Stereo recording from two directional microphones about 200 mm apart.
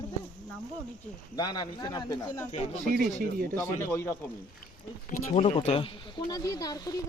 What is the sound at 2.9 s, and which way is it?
Speech, 45° right (ahead or behind).